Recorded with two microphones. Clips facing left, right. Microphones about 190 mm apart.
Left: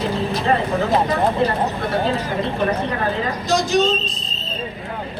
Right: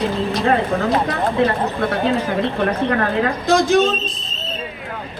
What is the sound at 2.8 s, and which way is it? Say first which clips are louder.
Speech: right 4 dB; 60° right (ahead or behind).